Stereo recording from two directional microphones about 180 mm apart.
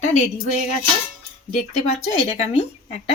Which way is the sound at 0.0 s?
40° left (ahead or behind).